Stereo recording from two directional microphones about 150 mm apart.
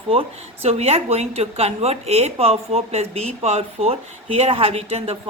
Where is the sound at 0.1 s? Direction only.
40° right (ahead or behind).